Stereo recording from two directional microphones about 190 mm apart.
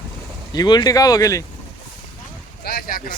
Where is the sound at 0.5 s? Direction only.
20° left (ahead or behind).